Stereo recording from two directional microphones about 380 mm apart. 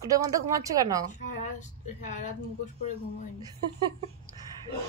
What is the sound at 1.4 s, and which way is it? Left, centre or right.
Speech, centre.